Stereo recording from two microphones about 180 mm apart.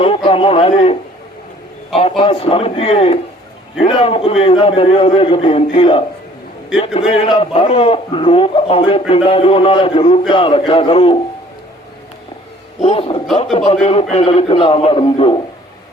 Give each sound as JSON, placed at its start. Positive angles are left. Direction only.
{"t": 0.0, "sound": "speech", "side_deg": 30}
{"t": 2.0, "sound": "a man's voice", "side_deg": 30}
{"t": 12.8, "sound": "a man's voice", "side_deg": 35}